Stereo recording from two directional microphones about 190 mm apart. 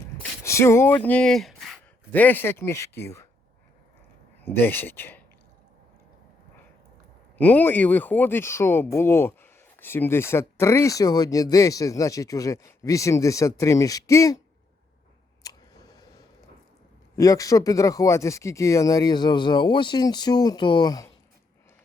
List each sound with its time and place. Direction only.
0.2 s speech: 15° left (ahead or behind)
4.4 s speech: 10° left (ahead or behind)
7.3 s speech: 10° left (ahead or behind)
15.4 s a sound: 20° left (ahead or behind)
17.2 s speech: 15° left (ahead or behind)